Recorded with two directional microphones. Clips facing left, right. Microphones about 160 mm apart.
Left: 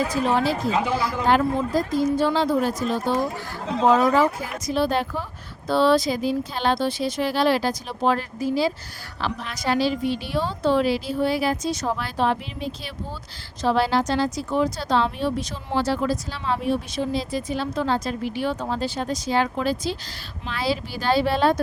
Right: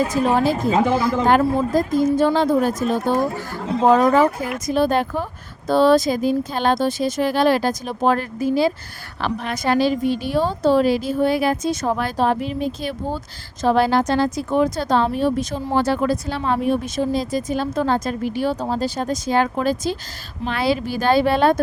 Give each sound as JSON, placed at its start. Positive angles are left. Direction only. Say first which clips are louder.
{"t": 0.1, "sound": "speech", "louder": "right 4 dB", "side_deg": -45}
{"t": 20.4, "sound": "speech", "louder": "right 5 dB", "side_deg": -55}